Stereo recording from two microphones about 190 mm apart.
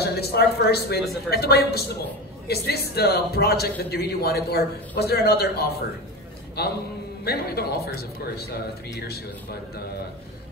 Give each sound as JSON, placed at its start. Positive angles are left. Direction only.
{"t": 0.0, "sound": "a man's voice", "side_deg": 60}